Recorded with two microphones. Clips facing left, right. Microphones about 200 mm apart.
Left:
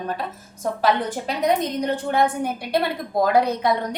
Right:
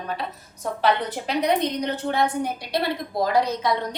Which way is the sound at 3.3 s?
55° left (ahead or behind).